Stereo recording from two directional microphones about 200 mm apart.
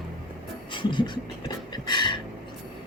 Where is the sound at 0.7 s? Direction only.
25° left (ahead or behind).